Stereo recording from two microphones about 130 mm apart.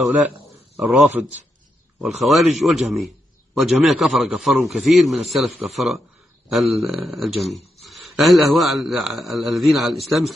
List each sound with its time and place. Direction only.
0.7 s a man's voice: centre (ahead or behind)